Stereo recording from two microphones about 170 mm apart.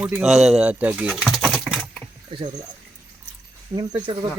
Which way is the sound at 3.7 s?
30° right (ahead or behind).